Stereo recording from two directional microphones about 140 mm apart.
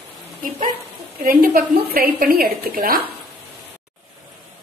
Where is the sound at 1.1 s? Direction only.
90° right.